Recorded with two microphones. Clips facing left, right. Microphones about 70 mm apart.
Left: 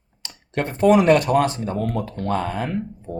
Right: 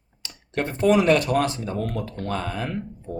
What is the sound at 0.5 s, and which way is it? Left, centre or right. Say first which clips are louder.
Speech: left 3 dB; left.